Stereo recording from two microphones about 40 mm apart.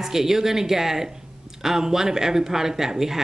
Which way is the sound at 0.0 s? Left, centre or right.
Centre.